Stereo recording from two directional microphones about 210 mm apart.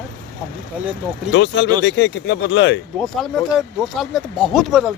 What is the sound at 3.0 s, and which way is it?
Speech, centre (ahead or behind).